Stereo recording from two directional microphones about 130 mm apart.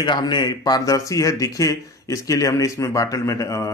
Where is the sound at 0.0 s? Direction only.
35° left (ahead or behind).